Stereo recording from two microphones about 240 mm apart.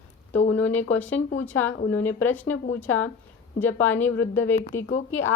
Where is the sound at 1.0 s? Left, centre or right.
Centre.